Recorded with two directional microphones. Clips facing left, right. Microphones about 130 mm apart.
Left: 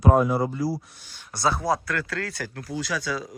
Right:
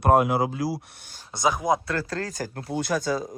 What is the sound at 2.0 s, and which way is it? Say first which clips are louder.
Speech: right 1 dB; 35° right (ahead or behind).